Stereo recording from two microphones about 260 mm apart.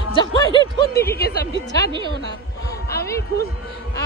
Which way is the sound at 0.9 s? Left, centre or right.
Left.